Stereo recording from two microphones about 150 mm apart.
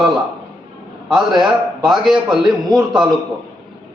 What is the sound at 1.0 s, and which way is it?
A man's voice, centre (ahead or behind).